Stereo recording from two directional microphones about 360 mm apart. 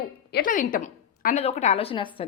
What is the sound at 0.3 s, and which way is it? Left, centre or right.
A woman's voice, left.